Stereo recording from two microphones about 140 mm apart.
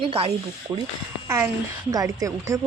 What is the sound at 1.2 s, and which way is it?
A woman's voice, 20° right (ahead or behind).